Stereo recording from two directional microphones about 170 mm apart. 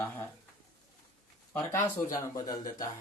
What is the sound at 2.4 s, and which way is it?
Speech, 20° left (ahead or behind).